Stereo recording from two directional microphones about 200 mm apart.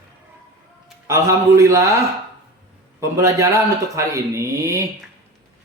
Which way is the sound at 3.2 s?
15° right (ahead or behind).